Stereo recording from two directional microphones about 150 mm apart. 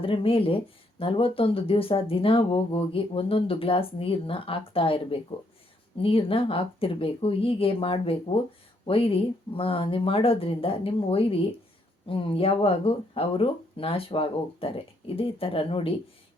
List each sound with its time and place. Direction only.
0.0 s speech: 35° left (ahead or behind)